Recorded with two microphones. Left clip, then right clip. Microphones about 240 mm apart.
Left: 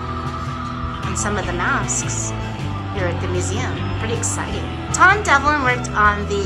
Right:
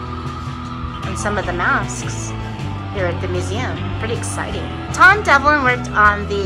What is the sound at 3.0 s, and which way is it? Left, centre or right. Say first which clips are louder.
Speech: right 2 dB; centre.